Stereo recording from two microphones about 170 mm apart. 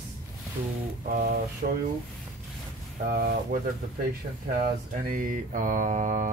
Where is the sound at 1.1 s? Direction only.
65° right (ahead or behind).